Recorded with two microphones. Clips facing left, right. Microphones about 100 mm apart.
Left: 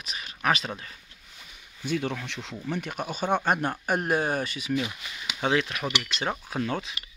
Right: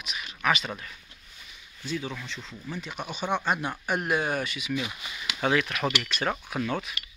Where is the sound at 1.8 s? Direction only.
60° left (ahead or behind).